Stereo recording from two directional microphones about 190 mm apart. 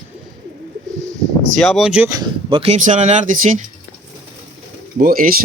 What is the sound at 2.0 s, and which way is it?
Speech, 20° right (ahead or behind).